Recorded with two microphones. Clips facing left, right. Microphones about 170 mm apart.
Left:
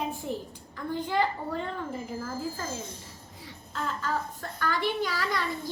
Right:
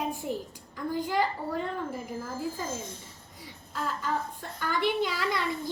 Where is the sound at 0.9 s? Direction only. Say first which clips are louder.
Even; 10° right (ahead or behind).